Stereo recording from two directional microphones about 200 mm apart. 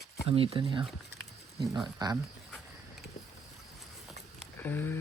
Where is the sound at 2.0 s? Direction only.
20° right (ahead or behind).